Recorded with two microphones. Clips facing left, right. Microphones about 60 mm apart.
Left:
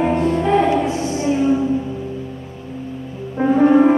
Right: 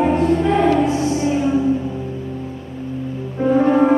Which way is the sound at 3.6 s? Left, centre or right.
Centre.